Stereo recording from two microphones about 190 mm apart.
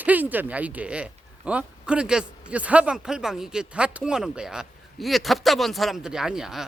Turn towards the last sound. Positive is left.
turn(degrees=-5)  # may be behind; listen again after turning